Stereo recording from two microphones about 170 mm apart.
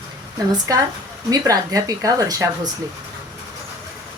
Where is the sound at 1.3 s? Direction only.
20° right (ahead or behind).